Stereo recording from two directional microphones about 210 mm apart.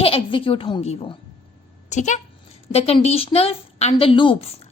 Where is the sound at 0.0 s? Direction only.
25° left (ahead or behind).